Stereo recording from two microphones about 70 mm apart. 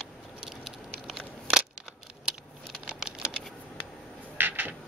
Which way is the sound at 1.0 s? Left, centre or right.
Centre.